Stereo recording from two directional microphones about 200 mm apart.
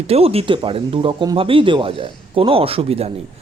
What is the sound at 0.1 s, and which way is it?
Speech, 30° right (ahead or behind).